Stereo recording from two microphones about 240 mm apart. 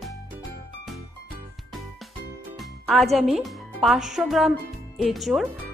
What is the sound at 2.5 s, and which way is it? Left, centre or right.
A woman's voice, centre.